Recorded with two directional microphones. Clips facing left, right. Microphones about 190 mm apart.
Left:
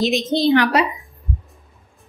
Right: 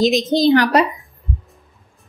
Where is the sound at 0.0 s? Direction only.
40° right (ahead or behind).